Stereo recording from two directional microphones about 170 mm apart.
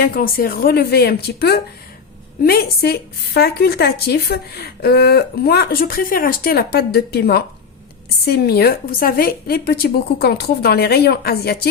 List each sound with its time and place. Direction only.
0.0 s a woman's voice: 60° left (ahead or behind)